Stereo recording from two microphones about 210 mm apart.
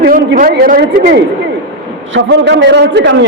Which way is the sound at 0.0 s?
45° right (ahead or behind).